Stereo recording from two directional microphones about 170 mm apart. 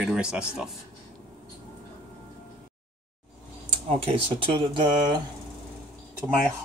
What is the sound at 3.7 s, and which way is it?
Speech, 35° right (ahead or behind).